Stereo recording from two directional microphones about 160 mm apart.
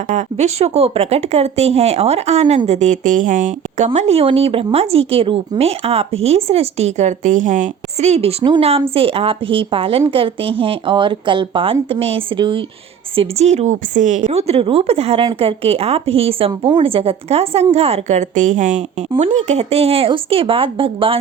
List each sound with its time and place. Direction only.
0.1 s speech: 45° right (ahead or behind); by 12.6 s 30° right (ahead or behind)
13.1 s speech: 45° right (ahead or behind)
14.3 s speech: 40° right (ahead or behind)